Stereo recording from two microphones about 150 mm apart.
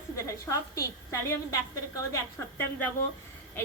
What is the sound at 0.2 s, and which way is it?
A woman's voice, 20° left (ahead or behind).